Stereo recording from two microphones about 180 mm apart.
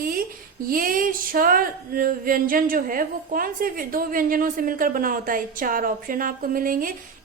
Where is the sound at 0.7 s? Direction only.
50° right (ahead or behind).